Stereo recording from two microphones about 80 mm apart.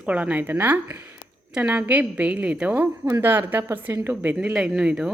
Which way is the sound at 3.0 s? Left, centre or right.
Right.